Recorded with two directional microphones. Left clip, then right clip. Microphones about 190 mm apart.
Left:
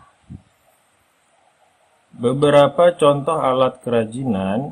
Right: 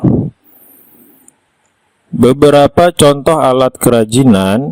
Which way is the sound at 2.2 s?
60° right (ahead or behind).